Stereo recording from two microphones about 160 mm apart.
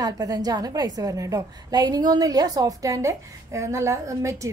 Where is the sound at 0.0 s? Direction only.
25° right (ahead or behind).